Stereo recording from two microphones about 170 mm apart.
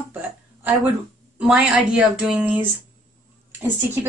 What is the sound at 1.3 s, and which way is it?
Speech, 5° right (ahead or behind).